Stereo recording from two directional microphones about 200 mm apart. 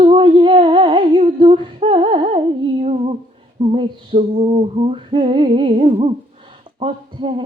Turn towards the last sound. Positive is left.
turn(degrees=-25)  # may be behind; listen again after turning